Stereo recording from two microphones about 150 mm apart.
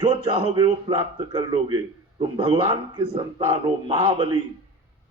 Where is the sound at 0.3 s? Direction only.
35° right (ahead or behind).